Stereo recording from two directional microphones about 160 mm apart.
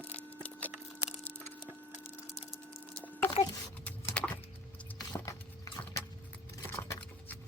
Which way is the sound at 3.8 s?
10° left (ahead or behind).